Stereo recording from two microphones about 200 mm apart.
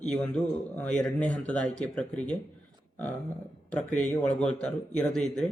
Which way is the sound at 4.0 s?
35° left (ahead or behind).